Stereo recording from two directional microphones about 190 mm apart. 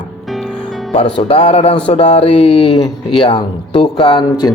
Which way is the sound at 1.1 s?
30° left (ahead or behind).